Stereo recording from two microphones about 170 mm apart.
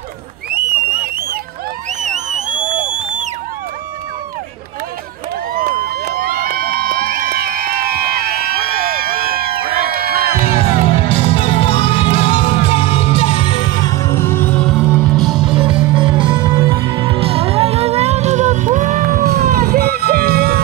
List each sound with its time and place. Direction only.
0.5 s a sound: 60° right (ahead or behind)
2.0 s music: 45° right (ahead or behind)
5.5 s crowd: 55° right (ahead or behind)
9.8 s music: 60° right (ahead or behind)
10.4 s music: 40° left (ahead or behind); by 15.4 s centre (ahead or behind)
15.6 s music: 30° right (ahead or behind); by 20.6 s 65° right (ahead or behind)